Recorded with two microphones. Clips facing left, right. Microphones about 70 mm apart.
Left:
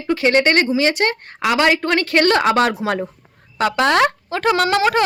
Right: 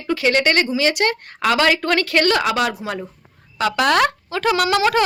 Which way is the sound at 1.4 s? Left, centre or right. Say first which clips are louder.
Left 1 dB; centre.